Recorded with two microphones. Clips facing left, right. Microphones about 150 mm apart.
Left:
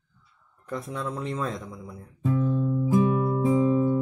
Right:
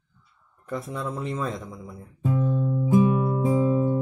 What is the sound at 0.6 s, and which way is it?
Speech, centre (ahead or behind).